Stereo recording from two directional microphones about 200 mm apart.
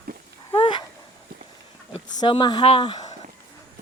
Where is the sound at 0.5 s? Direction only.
25° left (ahead or behind).